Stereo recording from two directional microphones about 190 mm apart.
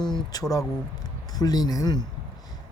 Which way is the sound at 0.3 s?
20° left (ahead or behind).